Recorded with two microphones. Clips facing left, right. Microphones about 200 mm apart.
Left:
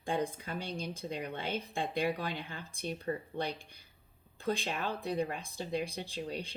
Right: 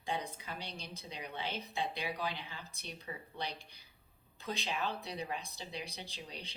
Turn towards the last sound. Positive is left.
turn(degrees=50)  # may be behind; listen again after turning